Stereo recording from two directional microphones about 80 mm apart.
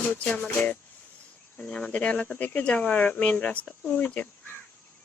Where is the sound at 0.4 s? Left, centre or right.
Left.